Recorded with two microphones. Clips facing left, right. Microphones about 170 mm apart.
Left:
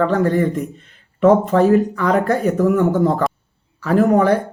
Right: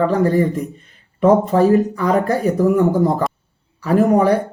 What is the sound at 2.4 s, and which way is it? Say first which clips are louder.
Speech: right 1 dB; 35° right (ahead or behind).